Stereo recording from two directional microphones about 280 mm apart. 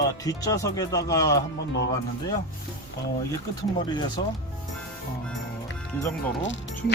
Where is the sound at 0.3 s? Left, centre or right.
Centre.